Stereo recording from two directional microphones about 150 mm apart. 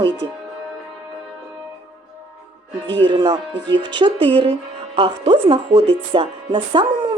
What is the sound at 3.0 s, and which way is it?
Speech, 30° right (ahead or behind).